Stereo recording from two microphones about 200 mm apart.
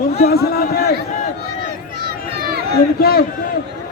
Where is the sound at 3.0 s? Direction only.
50° left (ahead or behind).